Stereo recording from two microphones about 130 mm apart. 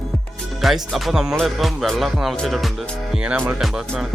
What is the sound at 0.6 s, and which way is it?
Speech, centre (ahead or behind).